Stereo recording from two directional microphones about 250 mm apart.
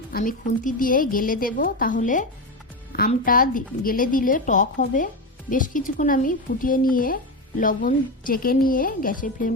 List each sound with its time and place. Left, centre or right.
0.1 s a woman's voice: left